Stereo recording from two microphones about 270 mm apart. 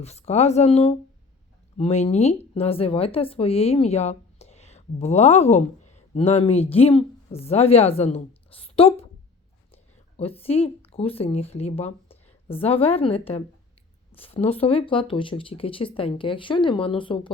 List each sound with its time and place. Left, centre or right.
0.0 s speech: left